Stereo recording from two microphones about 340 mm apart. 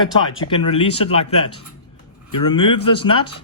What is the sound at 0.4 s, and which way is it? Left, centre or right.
Speech, centre.